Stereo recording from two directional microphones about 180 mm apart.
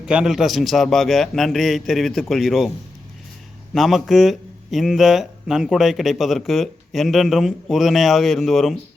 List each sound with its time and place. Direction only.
0.0 s speech: 5° right (ahead or behind)
3.8 s speech: centre (ahead or behind)